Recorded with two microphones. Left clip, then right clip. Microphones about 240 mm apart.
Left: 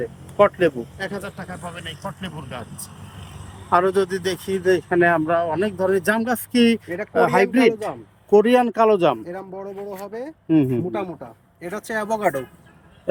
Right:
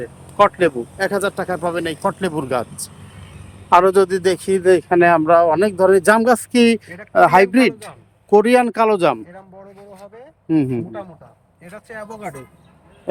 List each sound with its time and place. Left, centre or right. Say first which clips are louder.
0.3 s speech: right 3 dB; centre; by 2.6 s right
3.7 s speech: right 6 dB; centre
10.5 s speech: even; centre
11.9 s speech: left 10 dB; left